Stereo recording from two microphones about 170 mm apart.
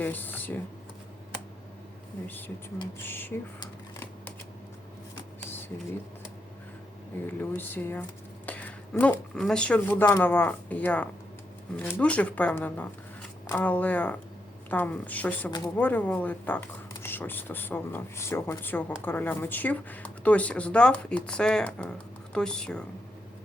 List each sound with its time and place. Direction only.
0.0 s a sound: 10° left (ahead or behind)
3.0 s speech: 10° left (ahead or behind)
5.5 s a sound: 10° left (ahead or behind)
7.3 s speech: 10° left (ahead or behind)
15.4 s speech: 25° left (ahead or behind)
15.8 s speech: 10° left (ahead or behind)